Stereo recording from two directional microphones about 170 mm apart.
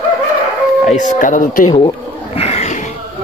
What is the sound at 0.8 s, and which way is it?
Speech, 45° left (ahead or behind).